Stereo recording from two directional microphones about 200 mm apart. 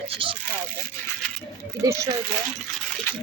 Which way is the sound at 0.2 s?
25° right (ahead or behind).